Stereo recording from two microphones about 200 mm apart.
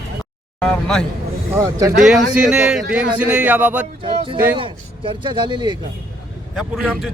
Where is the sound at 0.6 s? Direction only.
5° left (ahead or behind).